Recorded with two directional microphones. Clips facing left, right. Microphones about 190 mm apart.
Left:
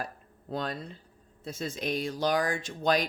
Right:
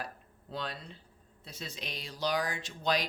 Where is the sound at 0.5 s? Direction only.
45° left (ahead or behind).